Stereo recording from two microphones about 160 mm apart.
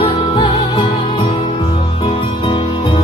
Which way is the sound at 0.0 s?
35° left (ahead or behind).